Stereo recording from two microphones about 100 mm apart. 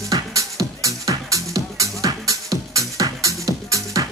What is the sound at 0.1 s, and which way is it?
Music, 35° right (ahead or behind).